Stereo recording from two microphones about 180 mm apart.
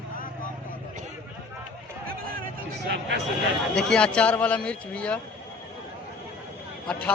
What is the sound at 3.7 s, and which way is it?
A man's voice, 5° left (ahead or behind).